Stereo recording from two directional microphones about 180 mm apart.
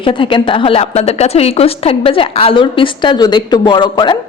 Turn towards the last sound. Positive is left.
turn(degrees=25)  # may be behind; listen again after turning